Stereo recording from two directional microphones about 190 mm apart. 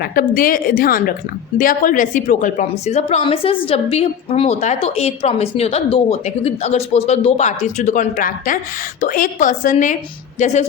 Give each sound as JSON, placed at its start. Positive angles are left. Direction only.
{"t": 0.0, "sound": "a woman's voice", "side_deg": 50}